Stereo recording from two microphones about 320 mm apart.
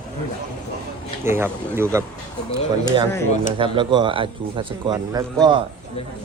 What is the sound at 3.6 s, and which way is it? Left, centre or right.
A man's voice, centre.